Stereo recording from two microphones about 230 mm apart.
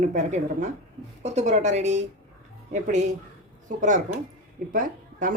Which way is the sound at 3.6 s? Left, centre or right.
Right.